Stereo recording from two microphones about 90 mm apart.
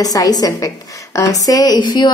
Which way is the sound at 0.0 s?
45° left (ahead or behind).